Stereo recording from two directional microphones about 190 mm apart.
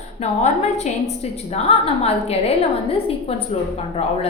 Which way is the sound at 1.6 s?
30° left (ahead or behind).